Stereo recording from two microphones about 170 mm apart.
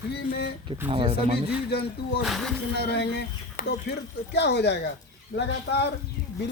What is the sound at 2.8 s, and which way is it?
Speech, 80° left.